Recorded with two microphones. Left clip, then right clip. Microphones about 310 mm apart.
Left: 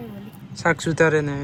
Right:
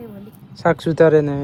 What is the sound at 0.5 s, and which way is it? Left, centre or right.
Speech, centre.